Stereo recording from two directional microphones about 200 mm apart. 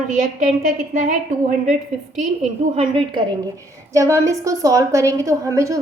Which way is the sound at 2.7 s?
30° right (ahead or behind).